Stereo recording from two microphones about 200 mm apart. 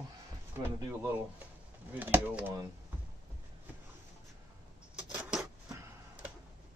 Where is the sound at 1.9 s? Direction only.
10° right (ahead or behind).